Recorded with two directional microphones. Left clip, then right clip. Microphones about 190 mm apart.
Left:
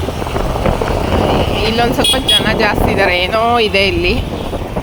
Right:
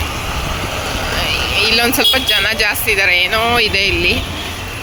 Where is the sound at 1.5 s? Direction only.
25° left (ahead or behind).